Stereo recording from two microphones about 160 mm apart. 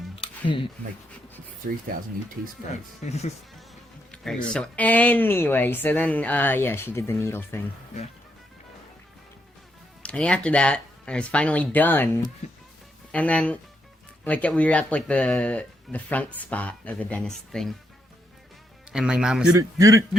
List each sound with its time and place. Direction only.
0.2 s a sound: 30° left (ahead or behind)
1.9 s speech: 65° right (ahead or behind)
3.0 s speech: 45° left (ahead or behind)
4.1 s speech: 5° left (ahead or behind)
10.0 s speech: 5° left (ahead or behind)
18.9 s speech: 5° right (ahead or behind)
19.5 s a man's voice: 20° right (ahead or behind)